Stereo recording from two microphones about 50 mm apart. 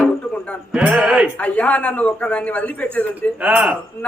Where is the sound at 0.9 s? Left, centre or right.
Right.